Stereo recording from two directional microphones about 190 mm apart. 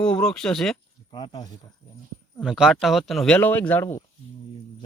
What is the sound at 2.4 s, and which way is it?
Speech, centre (ahead or behind).